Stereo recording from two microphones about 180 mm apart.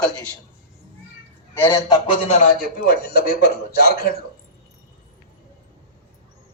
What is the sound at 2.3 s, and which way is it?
Speech, 40° left (ahead or behind).